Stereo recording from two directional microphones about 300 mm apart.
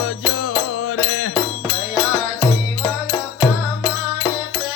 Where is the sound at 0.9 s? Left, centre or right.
Left.